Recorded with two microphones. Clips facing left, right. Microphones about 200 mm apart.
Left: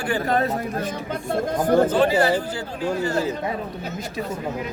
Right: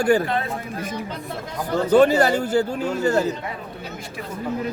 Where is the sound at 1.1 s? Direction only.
50° left (ahead or behind).